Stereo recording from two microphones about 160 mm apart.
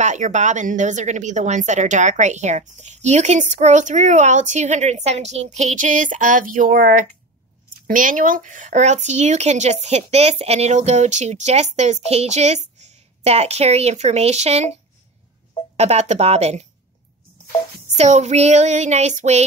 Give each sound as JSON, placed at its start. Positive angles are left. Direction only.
{"t": 0.0, "sound": "speech", "side_deg": -50}
{"t": 15.7, "sound": "speech", "side_deg": -40}
{"t": 17.8, "sound": "speech", "side_deg": -45}